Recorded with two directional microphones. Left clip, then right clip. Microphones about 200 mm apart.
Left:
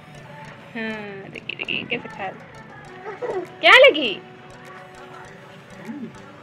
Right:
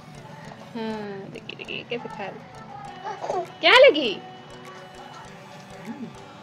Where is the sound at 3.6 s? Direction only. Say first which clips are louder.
Left 3 dB; 35° right (ahead or behind).